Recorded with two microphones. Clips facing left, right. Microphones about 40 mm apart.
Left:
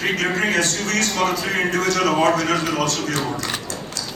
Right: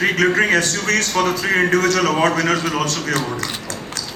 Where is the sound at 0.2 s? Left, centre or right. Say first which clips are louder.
Right 4 dB; right.